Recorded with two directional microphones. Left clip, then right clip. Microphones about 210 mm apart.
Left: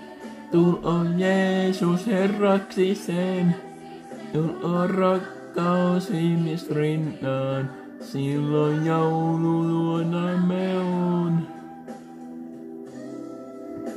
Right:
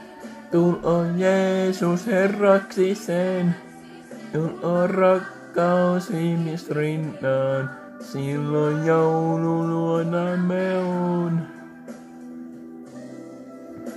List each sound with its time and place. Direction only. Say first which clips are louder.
0.5 s music: right 2 dB; 5° left (ahead or behind)